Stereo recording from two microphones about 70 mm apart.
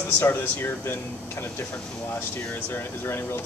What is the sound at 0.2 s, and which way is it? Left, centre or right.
Speech, left.